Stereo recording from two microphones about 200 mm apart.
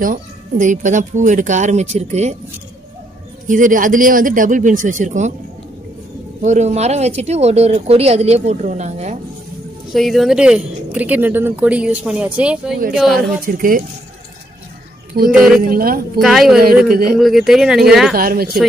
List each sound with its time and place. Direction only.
0.0 s speech: 40° right (ahead or behind)
3.4 s speech: 40° right (ahead or behind)
6.4 s speech: 35° right (ahead or behind)
9.9 s speech: centre (ahead or behind)
13.5 s speech: 45° right (ahead or behind)
15.3 s speech: 5° right (ahead or behind)
15.6 s speech: 45° right (ahead or behind)
16.2 s speech: centre (ahead or behind)
16.8 s speech: 45° right (ahead or behind)
17.2 s speech: centre (ahead or behind)
18.1 s speech: 45° right (ahead or behind)